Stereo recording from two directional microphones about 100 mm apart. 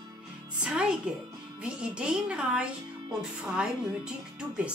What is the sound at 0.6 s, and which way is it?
A woman's voice, 10° right (ahead or behind).